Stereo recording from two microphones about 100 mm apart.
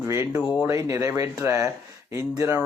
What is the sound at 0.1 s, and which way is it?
Speech, 30° right (ahead or behind).